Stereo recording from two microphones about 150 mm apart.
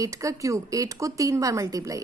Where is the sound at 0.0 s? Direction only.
20° right (ahead or behind).